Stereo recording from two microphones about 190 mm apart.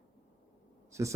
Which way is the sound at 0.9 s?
15° right (ahead or behind).